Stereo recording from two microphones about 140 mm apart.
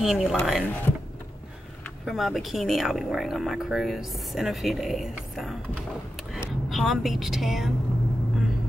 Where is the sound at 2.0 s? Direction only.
Centre (ahead or behind).